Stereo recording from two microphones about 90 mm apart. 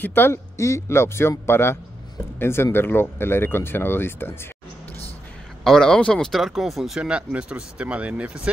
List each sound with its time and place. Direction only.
0.0 s speech: 25° left (ahead or behind)
0.6 s speech: 35° left (ahead or behind)
5.6 s speech: 5° left (ahead or behind); by 8.3 s 15° right (ahead or behind)